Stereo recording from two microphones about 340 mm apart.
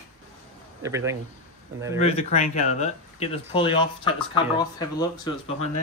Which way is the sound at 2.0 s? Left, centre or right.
Centre.